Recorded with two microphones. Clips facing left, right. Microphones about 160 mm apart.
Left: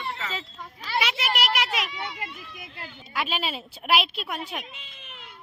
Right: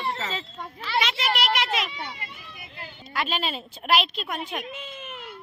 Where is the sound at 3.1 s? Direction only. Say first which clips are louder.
Right 1 dB; 5° left (ahead or behind).